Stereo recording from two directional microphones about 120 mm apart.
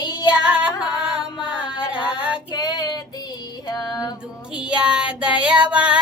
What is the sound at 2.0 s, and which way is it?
Female singing, 10° right (ahead or behind).